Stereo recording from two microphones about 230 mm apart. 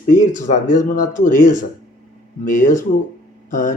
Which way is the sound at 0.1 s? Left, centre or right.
Left.